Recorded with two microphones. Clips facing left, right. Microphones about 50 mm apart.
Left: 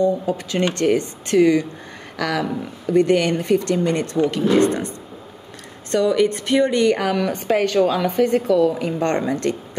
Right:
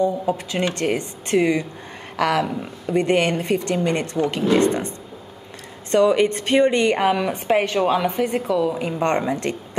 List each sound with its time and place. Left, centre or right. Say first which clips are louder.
0.0 s a woman's voice: left 1 dB; centre
5.9 s a woman's voice: right 1 dB; right